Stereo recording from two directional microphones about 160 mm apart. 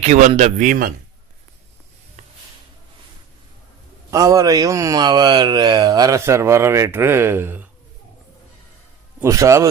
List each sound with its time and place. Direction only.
0.0 s a man's voice: 45° right (ahead or behind)
0.4 s a man's voice: 55° right (ahead or behind)
4.1 s speech: 20° right (ahead or behind)
9.2 s speech: 20° right (ahead or behind)